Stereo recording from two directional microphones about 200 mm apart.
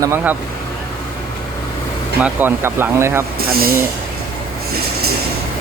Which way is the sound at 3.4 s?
45° right (ahead or behind).